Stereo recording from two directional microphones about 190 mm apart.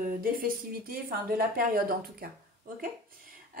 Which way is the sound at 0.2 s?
50° right (ahead or behind).